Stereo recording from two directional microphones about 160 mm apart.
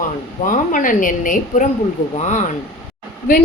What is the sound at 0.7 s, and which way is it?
A woman's voice, 55° left (ahead or behind).